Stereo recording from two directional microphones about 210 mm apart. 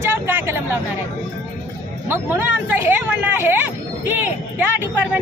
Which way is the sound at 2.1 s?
10° right (ahead or behind).